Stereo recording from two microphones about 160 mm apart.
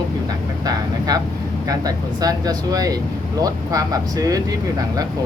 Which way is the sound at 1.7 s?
25° right (ahead or behind).